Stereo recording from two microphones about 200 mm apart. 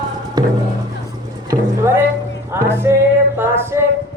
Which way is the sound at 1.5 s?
15° right (ahead or behind).